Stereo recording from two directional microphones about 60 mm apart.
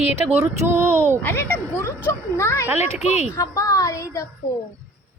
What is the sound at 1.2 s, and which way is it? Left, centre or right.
Speech, left.